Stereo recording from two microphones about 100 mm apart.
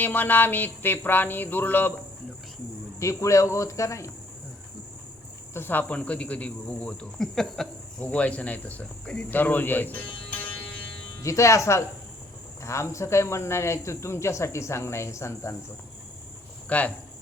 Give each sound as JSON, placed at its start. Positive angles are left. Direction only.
{"t": 0.0, "sound": "speech", "side_deg": 20}
{"t": 3.0, "sound": "speech", "side_deg": 30}
{"t": 5.5, "sound": "speech", "side_deg": 20}
{"t": 8.0, "sound": "speech", "side_deg": 15}
{"t": 10.2, "sound": "music", "side_deg": 15}
{"t": 11.2, "sound": "speech", "side_deg": 30}
{"t": 16.6, "sound": "speech", "side_deg": 15}